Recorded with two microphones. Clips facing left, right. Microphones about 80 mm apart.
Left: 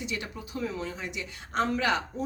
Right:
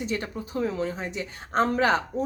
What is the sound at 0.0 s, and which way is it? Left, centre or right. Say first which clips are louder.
A woman's voice: right 5 dB; right.